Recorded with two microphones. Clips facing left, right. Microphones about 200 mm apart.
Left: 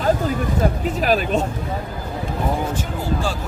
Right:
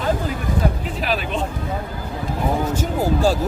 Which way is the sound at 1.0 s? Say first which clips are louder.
Left 4 dB; 45° left (ahead or behind).